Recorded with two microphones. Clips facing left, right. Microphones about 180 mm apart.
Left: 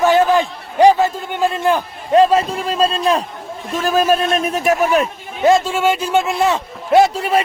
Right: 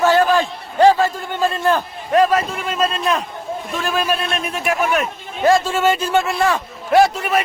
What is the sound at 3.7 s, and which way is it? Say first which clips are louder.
A man's voice: left 6 dB; 40° left (ahead or behind).